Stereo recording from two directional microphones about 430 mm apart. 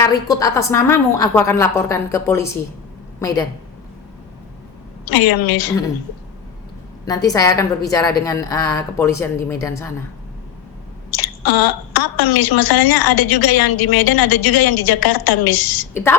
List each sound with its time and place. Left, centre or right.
0.0 s a woman's voice: centre
5.0 s a woman's voice: left
7.0 s a woman's voice: centre
11.1 s a woman's voice: left